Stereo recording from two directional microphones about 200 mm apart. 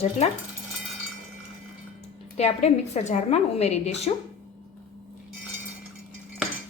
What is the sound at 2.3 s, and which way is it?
A woman's voice, 30° left (ahead or behind).